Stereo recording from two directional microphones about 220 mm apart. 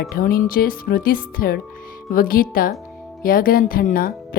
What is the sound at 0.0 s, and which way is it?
Speech, 45° left (ahead or behind).